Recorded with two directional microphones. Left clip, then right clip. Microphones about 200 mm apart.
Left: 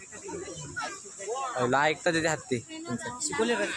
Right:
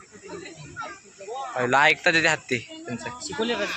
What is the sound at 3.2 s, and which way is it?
Speech, 40° right (ahead or behind).